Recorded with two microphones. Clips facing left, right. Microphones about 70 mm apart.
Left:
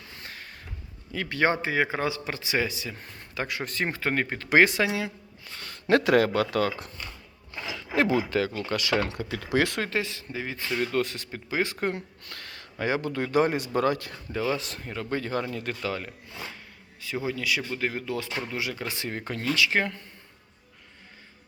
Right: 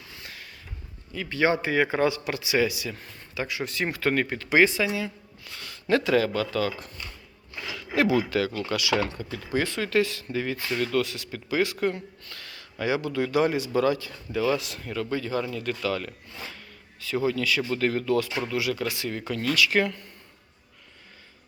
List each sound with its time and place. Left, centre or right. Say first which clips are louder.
0.2 s a sound: left 2 dB; left
1.3 s speech: right 1 dB; left
1.6 s speech: right 3 dB; left
3.0 s speech: even; left
3.9 s speech: right 2 dB; left
4.4 s speech: left 1 dB; left
5.5 s speech: left 2 dB; left
7.5 s a sound: even; left
8.3 s speech: right 1 dB; left
8.7 s speech: even; left
9.0 s speech: left 2 dB; left
9.9 s speech: right 6 dB; left
10.8 s speech: even; left
14.3 s speech: right 3 dB; left